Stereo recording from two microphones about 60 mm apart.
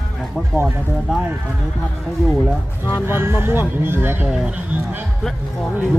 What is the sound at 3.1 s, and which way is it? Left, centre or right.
Speech, right.